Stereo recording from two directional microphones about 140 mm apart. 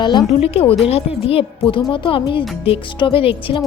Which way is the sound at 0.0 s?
30° left (ahead or behind).